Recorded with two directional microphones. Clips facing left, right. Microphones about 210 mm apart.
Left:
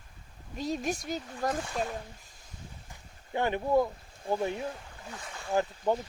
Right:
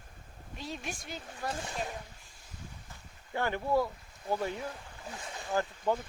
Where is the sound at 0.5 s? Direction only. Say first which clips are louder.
Left 9 dB; 40° left (ahead or behind).